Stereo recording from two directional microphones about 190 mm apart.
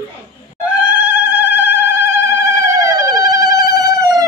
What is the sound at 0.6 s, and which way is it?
Cat, 10° right (ahead or behind).